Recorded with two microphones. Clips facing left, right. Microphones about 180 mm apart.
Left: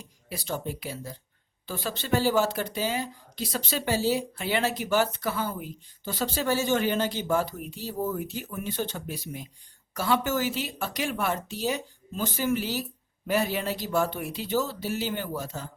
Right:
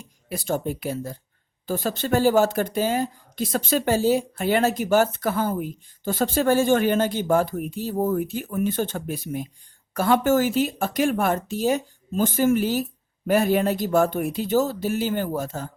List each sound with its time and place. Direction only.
0.3 s speech: 50° right (ahead or behind)